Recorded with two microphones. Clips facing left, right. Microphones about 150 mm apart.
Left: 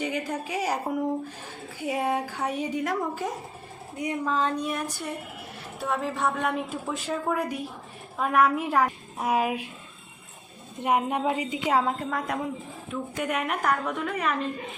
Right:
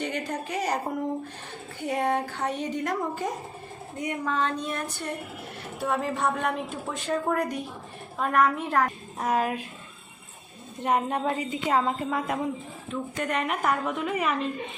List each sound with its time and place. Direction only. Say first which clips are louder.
0.0 s a woman's voice: left 1 dB; 5° left (ahead or behind)
10.8 s a woman's voice: left 1 dB; 10° left (ahead or behind)
11.9 s a woman's voice: right 1 dB; 5° right (ahead or behind)
12.9 s a woman's voice: even; 10° left (ahead or behind)